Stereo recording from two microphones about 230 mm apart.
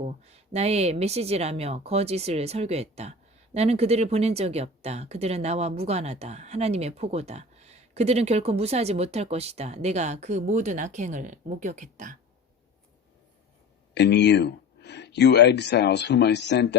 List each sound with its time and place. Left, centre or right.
0.0 s speech: right
13.9 s speech: left